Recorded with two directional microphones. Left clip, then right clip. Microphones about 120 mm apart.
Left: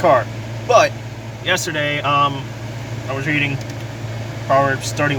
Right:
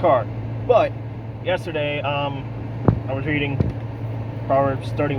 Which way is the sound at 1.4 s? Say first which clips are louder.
Left 4 dB; 35° left (ahead or behind).